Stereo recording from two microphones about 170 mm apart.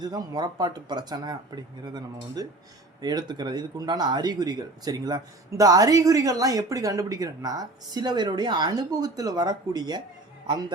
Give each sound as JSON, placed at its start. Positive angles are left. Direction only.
{"t": 0.0, "sound": "speech", "side_deg": -25}